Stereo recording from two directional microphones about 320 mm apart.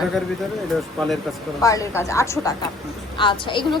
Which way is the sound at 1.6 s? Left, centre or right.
Centre.